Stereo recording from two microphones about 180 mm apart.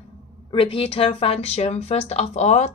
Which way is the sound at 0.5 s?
30° left (ahead or behind).